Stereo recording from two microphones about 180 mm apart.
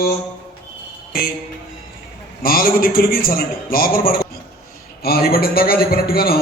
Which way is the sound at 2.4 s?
55° left (ahead or behind).